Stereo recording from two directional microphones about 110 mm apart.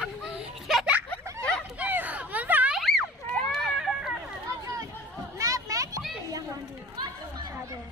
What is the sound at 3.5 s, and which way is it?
Run, centre (ahead or behind).